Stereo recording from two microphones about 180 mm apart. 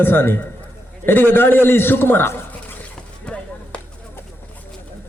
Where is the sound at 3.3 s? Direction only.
5° left (ahead or behind).